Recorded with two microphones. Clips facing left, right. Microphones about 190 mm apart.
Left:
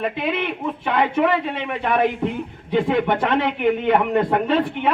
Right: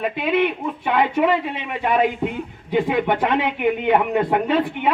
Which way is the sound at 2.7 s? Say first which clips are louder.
Even; 10° right (ahead or behind).